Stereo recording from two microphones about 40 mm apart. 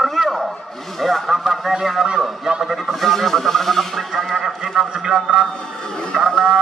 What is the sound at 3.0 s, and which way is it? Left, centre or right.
Speech, centre.